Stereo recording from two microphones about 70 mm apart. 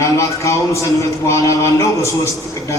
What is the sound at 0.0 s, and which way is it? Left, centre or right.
A man's voice, left.